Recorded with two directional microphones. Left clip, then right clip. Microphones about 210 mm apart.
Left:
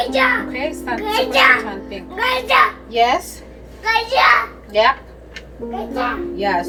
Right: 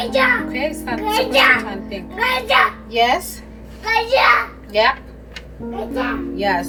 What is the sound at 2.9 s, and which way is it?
Speech, 5° right (ahead or behind).